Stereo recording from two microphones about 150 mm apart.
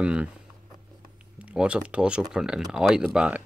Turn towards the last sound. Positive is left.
turn(degrees=-5)  # may be behind; listen again after turning